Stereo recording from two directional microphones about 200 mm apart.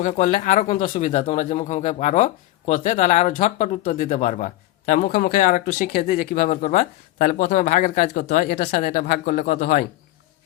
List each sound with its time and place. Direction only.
0.0 s speech: 40° left (ahead or behind)